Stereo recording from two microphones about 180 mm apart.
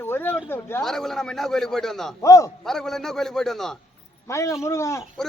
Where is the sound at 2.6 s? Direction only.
Centre (ahead or behind).